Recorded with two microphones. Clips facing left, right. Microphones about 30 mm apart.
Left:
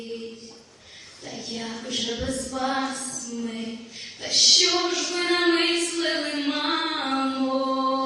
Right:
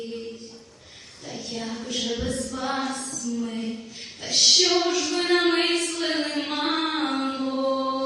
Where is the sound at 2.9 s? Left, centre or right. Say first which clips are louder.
Right 1 dB; right.